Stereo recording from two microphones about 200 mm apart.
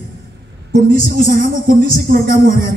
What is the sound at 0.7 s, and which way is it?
A woman's voice, 45° right (ahead or behind).